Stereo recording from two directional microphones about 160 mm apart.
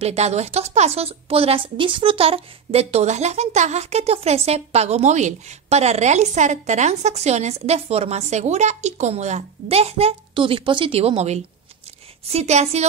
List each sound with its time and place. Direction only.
0.0 s speech: 40° right (ahead or behind)